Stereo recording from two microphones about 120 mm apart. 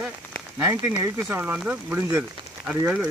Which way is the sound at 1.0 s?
20° right (ahead or behind).